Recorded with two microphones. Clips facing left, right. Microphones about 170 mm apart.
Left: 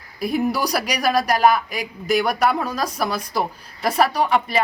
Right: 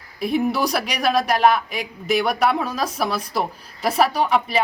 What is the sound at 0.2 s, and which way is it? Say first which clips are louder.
Speech: right 1 dB; centre (ahead or behind).